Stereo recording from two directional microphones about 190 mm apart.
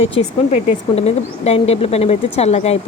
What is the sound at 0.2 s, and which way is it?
A woman's voice, 35° left (ahead or behind).